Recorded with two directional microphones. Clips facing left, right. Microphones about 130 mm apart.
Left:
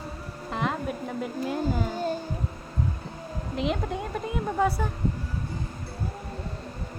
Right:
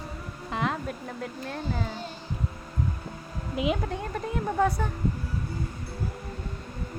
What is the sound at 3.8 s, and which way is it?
A woman's voice, 5° left (ahead or behind).